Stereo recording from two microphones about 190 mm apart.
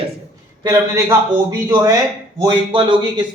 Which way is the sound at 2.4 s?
25° right (ahead or behind).